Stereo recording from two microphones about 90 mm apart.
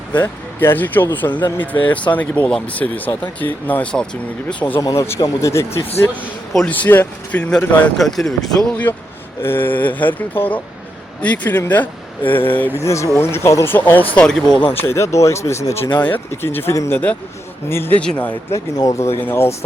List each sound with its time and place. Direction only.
0.2 s speech: 25° left (ahead or behind)
3.9 s speech: 10° left (ahead or behind)
4.8 s speech: 35° left (ahead or behind); by 7.9 s 20° left (ahead or behind)
7.9 s speech: 5° left (ahead or behind)
8.7 s speech: 20° left (ahead or behind)
12.8 s speech: 35° left (ahead or behind)
14.2 s speech: 5° left (ahead or behind)
14.8 s speech: 30° left (ahead or behind)
16.0 s speech: 20° left (ahead or behind)
18.0 s speech: 15° left (ahead or behind)
18.8 s speech: 35° left (ahead or behind)